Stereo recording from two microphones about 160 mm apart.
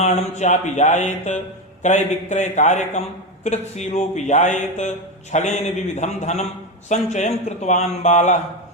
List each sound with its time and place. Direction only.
0.0 s speech: 45° left (ahead or behind)